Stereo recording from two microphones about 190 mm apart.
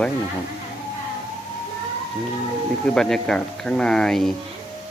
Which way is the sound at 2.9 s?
5° left (ahead or behind).